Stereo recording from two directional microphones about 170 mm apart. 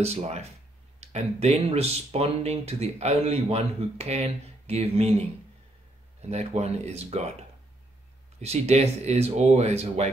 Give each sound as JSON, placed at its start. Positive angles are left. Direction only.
{"t": 0.0, "sound": "speech", "side_deg": -40}
{"t": 6.2, "sound": "speech", "side_deg": -40}
{"t": 8.4, "sound": "speech", "side_deg": -40}